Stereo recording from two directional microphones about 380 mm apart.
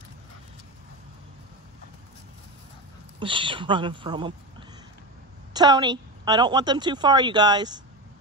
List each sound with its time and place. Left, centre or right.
3.2 s a woman's voice: centre